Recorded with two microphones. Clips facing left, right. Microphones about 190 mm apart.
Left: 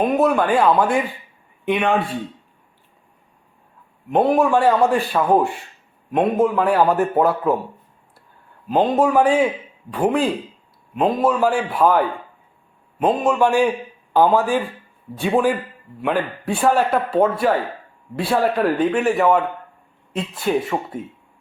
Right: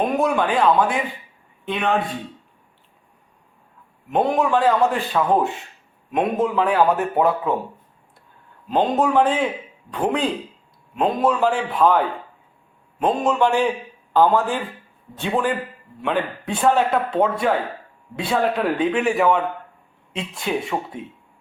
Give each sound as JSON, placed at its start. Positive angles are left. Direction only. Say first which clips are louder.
{"t": 0.0, "sound": "a man's voice", "louder": "left 3 dB", "side_deg": 0}
{"t": 4.1, "sound": "a man's voice", "louder": "left 3 dB", "side_deg": 10}
{"t": 8.7, "sound": "a man's voice", "louder": "left 2 dB", "side_deg": 10}
{"t": 16.6, "sound": "a man's voice", "louder": "even", "side_deg": 5}